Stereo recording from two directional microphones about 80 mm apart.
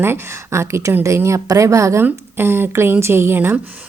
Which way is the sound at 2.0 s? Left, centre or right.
Right.